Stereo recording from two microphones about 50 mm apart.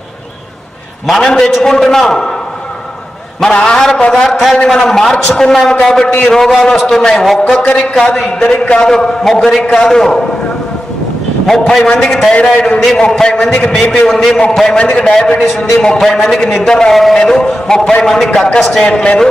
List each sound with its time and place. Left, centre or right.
1.0 s a man's voice: centre
3.4 s a man's voice: centre
7.5 s a man's voice: centre
11.4 s a man's voice: centre
13.9 s a man's voice: centre
14.8 s a man's voice: left; by 18.9 s centre
18.9 s a man's voice: centre